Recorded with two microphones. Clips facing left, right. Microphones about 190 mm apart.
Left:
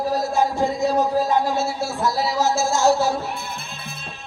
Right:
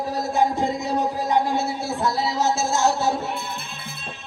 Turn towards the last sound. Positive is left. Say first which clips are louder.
# left 3 dB
turn(degrees=-20)  # may be behind; listen again after turning